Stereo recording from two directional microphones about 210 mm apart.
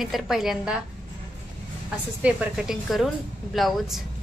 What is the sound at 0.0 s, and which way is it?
Speech, centre (ahead or behind).